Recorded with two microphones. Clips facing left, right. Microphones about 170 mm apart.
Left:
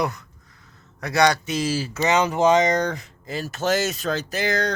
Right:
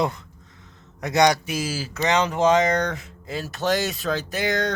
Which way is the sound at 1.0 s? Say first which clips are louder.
Right 1 dB; 20° right (ahead or behind).